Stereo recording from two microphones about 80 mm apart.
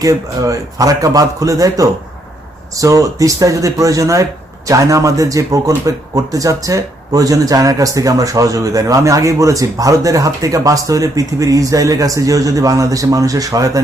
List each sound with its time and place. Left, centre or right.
0.0 s speech: right